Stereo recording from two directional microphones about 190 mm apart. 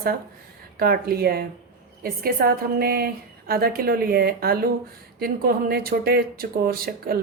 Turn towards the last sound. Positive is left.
turn(degrees=-55)  # may be behind; listen again after turning